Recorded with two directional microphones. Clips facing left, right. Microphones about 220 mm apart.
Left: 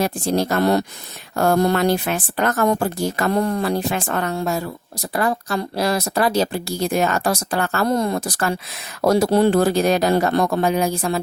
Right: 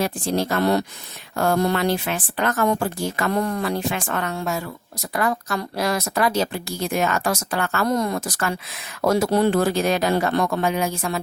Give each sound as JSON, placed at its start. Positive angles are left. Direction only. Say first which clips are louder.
{"t": 0.0, "sound": "speech", "louder": "left 3 dB", "side_deg": 45}